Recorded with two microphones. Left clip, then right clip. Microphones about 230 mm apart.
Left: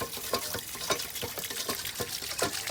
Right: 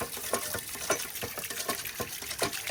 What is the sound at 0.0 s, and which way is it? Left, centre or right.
Water, right.